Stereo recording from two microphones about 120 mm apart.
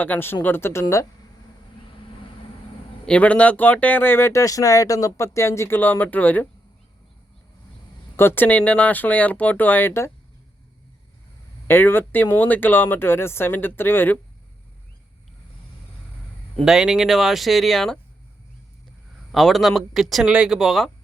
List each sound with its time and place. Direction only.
0.0 s speech: 15° left (ahead or behind)
3.1 s speech: 10° left (ahead or behind)
8.1 s speech: 20° left (ahead or behind)
11.7 s speech: 20° left (ahead or behind)
16.6 s speech: 5° right (ahead or behind)
19.3 s speech: centre (ahead or behind)